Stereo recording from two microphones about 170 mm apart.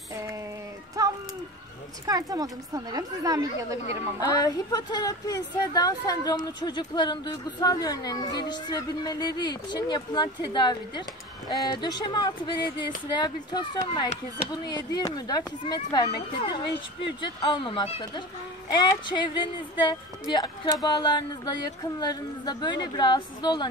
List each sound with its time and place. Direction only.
1.0 s a sound: 20° right (ahead or behind)
2.0 s a woman's voice: 20° right (ahead or behind)
4.2 s speech: 20° left (ahead or behind)